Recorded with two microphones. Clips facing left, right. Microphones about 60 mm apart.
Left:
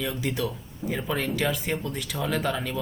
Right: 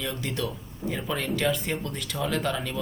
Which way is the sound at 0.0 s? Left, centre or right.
Centre.